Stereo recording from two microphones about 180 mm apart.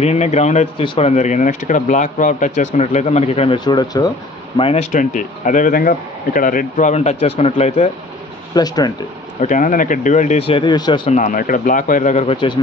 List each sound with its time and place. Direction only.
0.0 s speech: 40° left (ahead or behind); by 4.1 s 20° left (ahead or behind)
4.6 s speech: 35° left (ahead or behind)
8.5 s speech: 20° left (ahead or behind)
9.4 s speech: 45° left (ahead or behind); by 11.0 s 25° left (ahead or behind)
11.1 s speech: 40° left (ahead or behind)
12.3 s speech: 30° left (ahead or behind)